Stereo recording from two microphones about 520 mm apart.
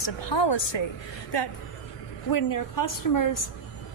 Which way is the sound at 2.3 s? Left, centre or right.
Left.